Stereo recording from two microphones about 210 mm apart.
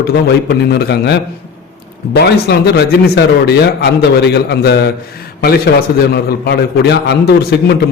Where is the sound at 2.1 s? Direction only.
50° left (ahead or behind).